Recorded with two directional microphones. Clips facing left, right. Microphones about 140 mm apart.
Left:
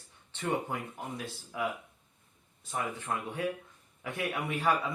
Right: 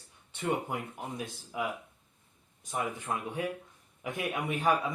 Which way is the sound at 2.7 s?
15° right (ahead or behind).